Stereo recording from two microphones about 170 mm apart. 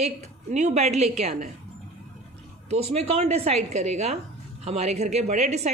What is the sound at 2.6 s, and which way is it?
Speech, 40° right (ahead or behind).